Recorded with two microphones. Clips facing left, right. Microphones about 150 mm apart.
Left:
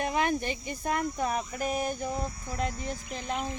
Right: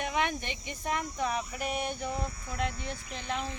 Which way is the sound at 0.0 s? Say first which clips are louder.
Left 4 dB; 40° left (ahead or behind).